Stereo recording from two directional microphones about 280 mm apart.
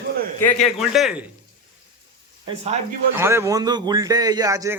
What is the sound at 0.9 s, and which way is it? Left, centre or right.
Speech, centre.